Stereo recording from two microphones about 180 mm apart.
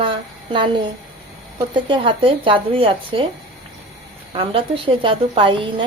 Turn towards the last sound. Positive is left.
turn(degrees=-30)  # may be behind; listen again after turning